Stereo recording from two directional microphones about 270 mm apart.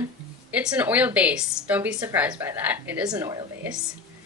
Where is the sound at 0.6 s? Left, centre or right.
Centre.